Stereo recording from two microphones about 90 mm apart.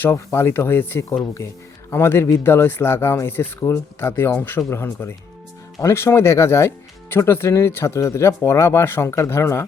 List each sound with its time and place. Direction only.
0.0 s speech: 30° left (ahead or behind)